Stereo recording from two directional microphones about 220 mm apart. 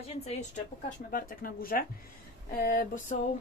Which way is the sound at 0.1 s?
30° left (ahead or behind).